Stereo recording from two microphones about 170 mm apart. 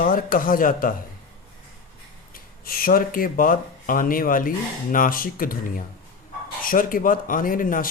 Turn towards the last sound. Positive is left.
turn(degrees=55)  # may be behind; listen again after turning